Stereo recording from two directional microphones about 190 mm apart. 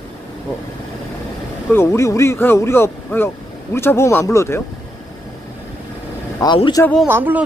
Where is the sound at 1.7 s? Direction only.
10° left (ahead or behind).